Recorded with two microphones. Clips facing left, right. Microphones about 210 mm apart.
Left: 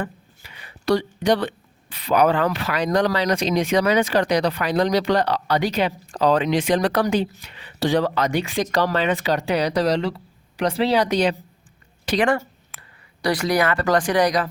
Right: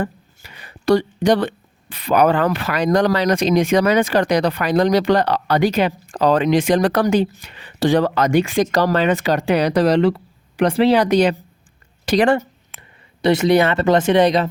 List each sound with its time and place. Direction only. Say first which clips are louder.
0.0 s speech: right 5 dB; 45° right (ahead or behind)
12.0 s a woman's voice: right 5 dB; 35° right (ahead or behind)
13.2 s speech: right 6 dB; 25° right (ahead or behind)